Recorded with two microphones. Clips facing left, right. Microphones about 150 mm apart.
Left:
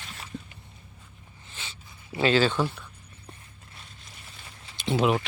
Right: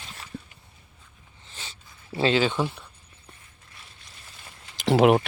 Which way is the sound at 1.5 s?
40° right (ahead or behind).